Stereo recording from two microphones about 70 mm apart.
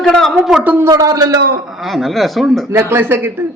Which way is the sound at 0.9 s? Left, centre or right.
Right.